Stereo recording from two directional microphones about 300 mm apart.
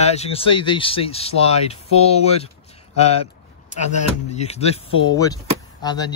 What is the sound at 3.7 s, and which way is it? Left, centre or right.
Speech, left.